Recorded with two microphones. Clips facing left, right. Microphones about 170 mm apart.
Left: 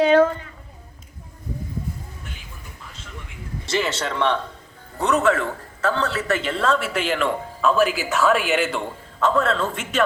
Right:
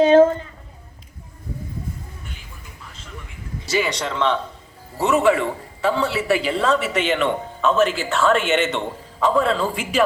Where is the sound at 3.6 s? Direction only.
Centre (ahead or behind).